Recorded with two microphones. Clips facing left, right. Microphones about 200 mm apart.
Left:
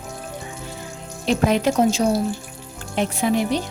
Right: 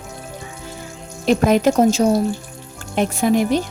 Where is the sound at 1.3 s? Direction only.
45° right (ahead or behind).